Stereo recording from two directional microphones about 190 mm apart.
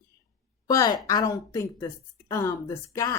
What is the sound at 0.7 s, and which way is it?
Speech, 20° left (ahead or behind).